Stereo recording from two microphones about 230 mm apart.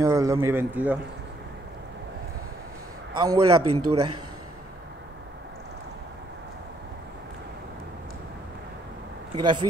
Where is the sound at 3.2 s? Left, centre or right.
Centre.